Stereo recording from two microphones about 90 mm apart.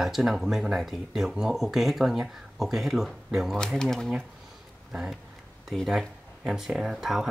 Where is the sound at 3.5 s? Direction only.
5° left (ahead or behind).